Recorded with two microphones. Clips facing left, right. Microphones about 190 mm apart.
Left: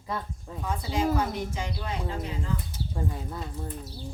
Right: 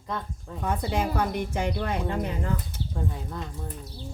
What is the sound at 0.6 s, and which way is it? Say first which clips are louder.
Speech: even; 60° right (ahead or behind).